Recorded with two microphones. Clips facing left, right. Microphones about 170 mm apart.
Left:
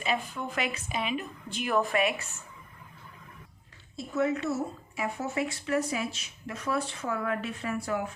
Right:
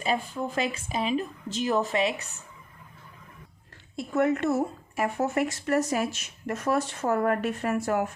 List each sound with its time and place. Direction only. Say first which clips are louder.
0.0 s speech: right 3 dB; 35° right (ahead or behind)
3.9 s speech: right 4 dB; 60° right (ahead or behind)